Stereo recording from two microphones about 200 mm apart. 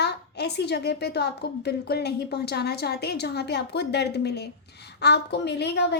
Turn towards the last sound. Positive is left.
turn(degrees=60)  # may be behind; listen again after turning